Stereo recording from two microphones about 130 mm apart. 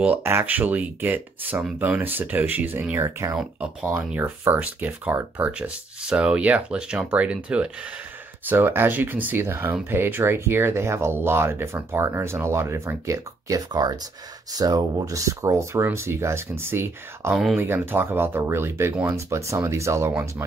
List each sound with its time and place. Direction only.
0.0 s speech: 15° right (ahead or behind)
3.3 s speech: 5° right (ahead or behind)
17.3 s speech: centre (ahead or behind)
17.6 s speech: 15° right (ahead or behind)